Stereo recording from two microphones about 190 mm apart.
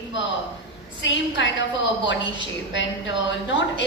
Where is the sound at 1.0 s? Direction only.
75° left (ahead or behind).